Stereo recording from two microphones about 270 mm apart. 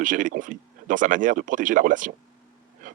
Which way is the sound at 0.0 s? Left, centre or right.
Right.